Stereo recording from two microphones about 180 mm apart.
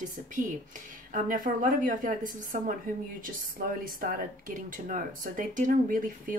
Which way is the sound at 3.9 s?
50° right (ahead or behind).